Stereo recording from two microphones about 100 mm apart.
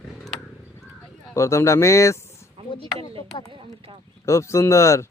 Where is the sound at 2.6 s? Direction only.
70° right (ahead or behind).